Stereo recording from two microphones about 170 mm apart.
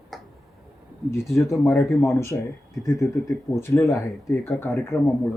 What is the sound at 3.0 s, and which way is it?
Speech, centre (ahead or behind).